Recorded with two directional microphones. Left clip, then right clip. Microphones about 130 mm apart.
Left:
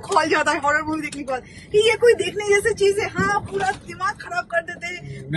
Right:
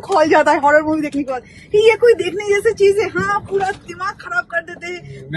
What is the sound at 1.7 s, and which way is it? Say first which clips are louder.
Speech: right 5 dB; 30° right (ahead or behind).